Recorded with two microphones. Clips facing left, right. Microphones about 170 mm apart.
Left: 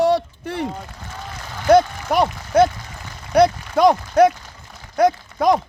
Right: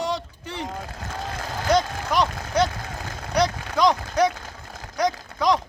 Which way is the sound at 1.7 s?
55° left (ahead or behind).